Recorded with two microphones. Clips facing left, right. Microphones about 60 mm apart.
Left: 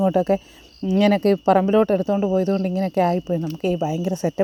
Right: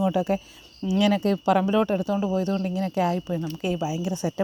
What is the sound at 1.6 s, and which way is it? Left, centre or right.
Speech, left.